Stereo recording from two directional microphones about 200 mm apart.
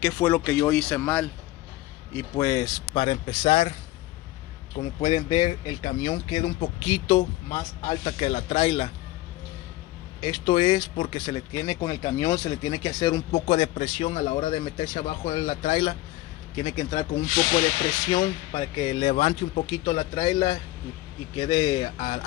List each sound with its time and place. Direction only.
0.0 s speech: 10° left (ahead or behind)
2.3 s speech: 20° left (ahead or behind)
5.0 s speech: 25° left (ahead or behind)
10.2 s speech: 25° left (ahead or behind)
13.3 s speech: 30° left (ahead or behind)
18.1 s speech: 25° left (ahead or behind)